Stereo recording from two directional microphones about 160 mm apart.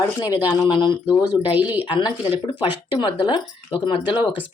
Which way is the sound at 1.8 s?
35° left (ahead or behind).